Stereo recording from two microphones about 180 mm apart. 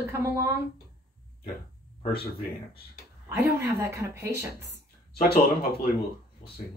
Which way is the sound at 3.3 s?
15° right (ahead or behind).